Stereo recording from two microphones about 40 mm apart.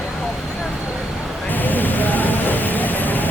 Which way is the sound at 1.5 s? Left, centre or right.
Left.